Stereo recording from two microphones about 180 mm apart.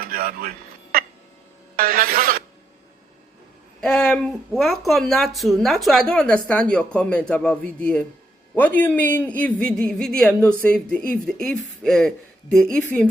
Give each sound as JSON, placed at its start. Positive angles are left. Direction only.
{"t": 0.0, "sound": "music", "side_deg": -55}
{"t": 0.9, "sound": "a sound", "side_deg": -55}
{"t": 3.8, "sound": "a woman's voice", "side_deg": 5}